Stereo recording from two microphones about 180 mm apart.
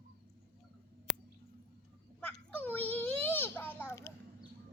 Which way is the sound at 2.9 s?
10° left (ahead or behind).